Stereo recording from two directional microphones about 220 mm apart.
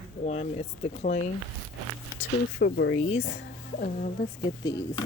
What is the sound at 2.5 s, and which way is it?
Speech, 50° left (ahead or behind).